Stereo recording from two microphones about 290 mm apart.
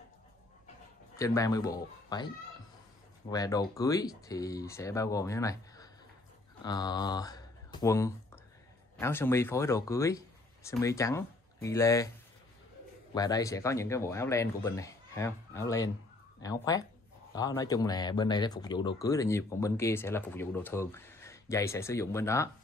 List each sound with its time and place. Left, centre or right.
1.1 s speech: centre
13.1 s speech: centre